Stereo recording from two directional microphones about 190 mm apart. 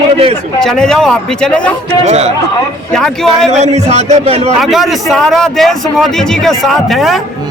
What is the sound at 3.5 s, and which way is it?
A man's voice, 35° right (ahead or behind).